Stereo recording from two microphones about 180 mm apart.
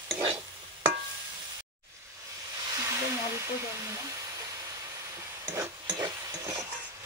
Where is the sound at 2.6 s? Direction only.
20° right (ahead or behind).